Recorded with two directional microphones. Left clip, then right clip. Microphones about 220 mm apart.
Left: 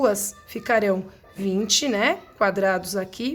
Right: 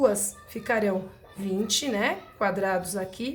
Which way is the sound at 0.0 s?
45° left (ahead or behind).